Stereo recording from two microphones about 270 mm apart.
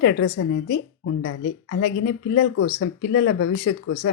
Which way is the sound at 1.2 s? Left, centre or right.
Left.